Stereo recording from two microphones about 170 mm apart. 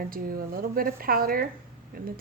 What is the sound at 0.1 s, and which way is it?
A woman's voice, 60° right (ahead or behind).